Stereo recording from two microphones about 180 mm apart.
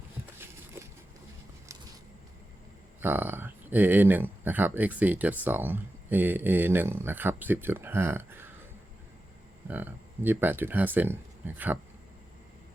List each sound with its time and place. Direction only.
3.0 s speech: 10° right (ahead or behind)
9.6 s speech: 10° right (ahead or behind)